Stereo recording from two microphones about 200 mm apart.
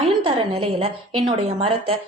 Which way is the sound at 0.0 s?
30° right (ahead or behind).